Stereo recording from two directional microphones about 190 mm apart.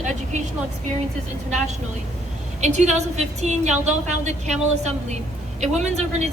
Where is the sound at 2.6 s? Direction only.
40° right (ahead or behind).